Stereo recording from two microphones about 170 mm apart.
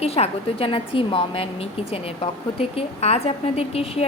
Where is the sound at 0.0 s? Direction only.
35° left (ahead or behind).